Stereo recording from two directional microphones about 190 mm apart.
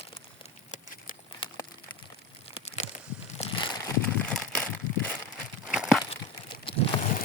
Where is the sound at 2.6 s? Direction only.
35° left (ahead or behind).